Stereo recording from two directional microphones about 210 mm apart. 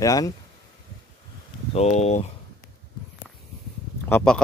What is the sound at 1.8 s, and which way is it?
Speech, 30° left (ahead or behind).